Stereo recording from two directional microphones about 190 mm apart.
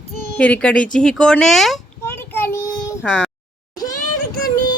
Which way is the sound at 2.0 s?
10° left (ahead or behind).